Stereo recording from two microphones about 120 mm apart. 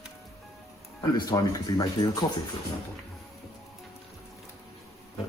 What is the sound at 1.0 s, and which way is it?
Speech, 35° left (ahead or behind).